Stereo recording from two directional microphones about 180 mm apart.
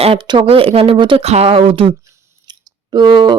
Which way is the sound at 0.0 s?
30° right (ahead or behind).